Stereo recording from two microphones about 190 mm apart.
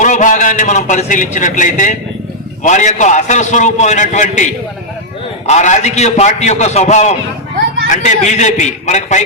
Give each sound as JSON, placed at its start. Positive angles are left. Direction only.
{"t": 0.0, "sound": "a man's voice", "side_deg": 40}